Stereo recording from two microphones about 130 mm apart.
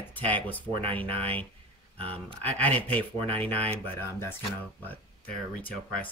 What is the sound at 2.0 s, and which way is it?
Speech, 45° right (ahead or behind).